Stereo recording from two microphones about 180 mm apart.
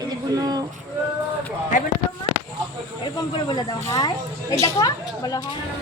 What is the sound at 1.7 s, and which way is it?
Speech, 45° left (ahead or behind).